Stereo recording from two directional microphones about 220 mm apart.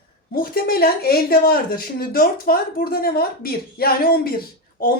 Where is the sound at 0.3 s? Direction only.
45° left (ahead or behind).